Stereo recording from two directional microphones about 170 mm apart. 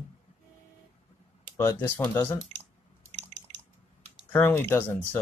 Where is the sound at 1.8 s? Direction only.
10° left (ahead or behind).